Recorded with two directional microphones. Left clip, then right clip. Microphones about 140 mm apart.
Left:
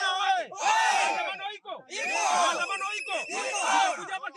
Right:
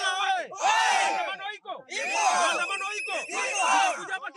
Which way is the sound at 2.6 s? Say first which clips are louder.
Right 1 dB; 15° right (ahead or behind).